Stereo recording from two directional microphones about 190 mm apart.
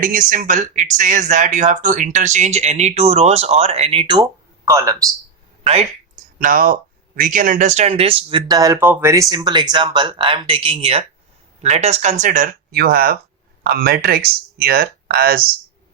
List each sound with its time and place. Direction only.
0.0 s speech: 45° right (ahead or behind); by 5.0 s 15° right (ahead or behind)
6.4 s speech: 45° right (ahead or behind)